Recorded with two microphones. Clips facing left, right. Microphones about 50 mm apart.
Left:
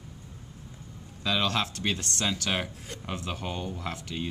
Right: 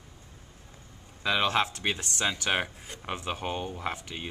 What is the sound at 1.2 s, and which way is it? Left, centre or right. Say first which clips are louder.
Speech: right 2 dB; right.